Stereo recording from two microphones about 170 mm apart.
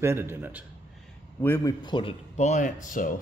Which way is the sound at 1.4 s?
15° left (ahead or behind).